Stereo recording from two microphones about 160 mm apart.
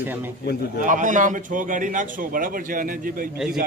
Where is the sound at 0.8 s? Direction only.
55° right (ahead or behind).